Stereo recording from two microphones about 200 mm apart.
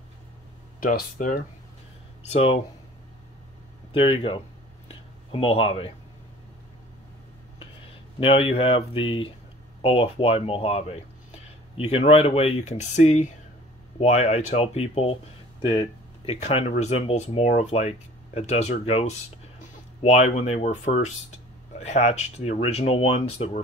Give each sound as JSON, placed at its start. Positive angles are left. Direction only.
{"t": 0.7, "sound": "speech", "side_deg": 45}
{"t": 2.2, "sound": "speech", "side_deg": 30}
{"t": 3.9, "sound": "speech", "side_deg": 25}
{"t": 4.8, "sound": "a sound", "side_deg": 30}
{"t": 8.2, "sound": "speech", "side_deg": 30}
{"t": 16.3, "sound": "speech", "side_deg": 30}